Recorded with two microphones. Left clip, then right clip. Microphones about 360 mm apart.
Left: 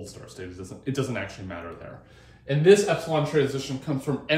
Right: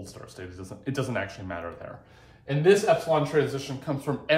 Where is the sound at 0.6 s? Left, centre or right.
Centre.